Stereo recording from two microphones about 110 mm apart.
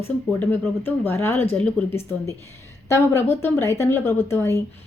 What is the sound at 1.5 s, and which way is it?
Speech, 10° left (ahead or behind).